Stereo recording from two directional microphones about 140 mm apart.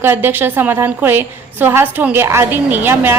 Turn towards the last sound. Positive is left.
turn(degrees=-15)  # may be behind; listen again after turning